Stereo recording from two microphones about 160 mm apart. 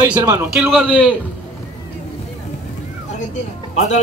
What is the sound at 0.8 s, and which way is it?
Speech, 5° left (ahead or behind).